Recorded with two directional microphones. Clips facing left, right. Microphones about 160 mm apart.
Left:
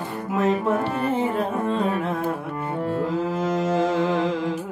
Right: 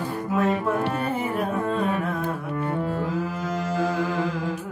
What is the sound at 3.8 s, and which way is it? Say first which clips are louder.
Mantra: left 1 dB; 20° left (ahead or behind).